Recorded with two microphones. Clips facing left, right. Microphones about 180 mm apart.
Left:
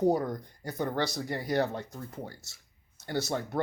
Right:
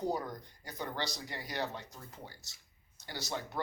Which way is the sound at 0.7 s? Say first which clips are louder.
Left 8 dB; 50° left (ahead or behind).